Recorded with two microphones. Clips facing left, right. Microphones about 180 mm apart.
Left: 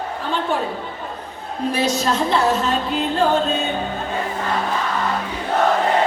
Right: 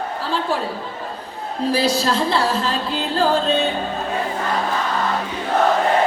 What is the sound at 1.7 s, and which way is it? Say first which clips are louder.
A woman's voice: right 1 dB; 30° right (ahead or behind).